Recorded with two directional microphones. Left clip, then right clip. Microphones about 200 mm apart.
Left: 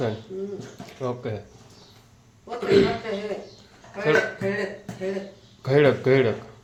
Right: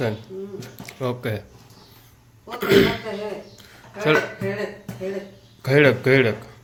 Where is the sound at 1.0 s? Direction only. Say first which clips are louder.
Right 3 dB; 20° right (ahead or behind).